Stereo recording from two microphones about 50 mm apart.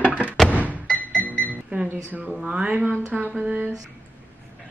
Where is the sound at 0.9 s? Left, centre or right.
Left.